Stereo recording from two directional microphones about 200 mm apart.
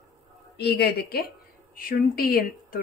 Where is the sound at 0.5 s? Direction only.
55° left (ahead or behind).